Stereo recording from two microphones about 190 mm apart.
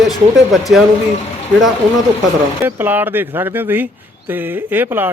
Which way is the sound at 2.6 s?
10° right (ahead or behind).